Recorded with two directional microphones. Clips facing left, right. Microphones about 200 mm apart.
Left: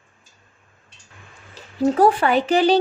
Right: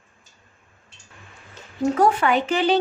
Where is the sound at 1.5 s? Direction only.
35° left (ahead or behind).